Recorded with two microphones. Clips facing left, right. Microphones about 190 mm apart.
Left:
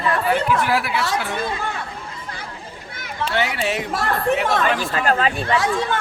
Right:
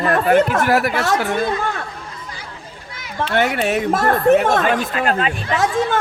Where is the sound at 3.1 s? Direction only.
50° right (ahead or behind).